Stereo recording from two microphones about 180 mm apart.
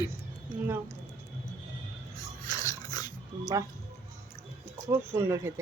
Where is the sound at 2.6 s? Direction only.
20° left (ahead or behind).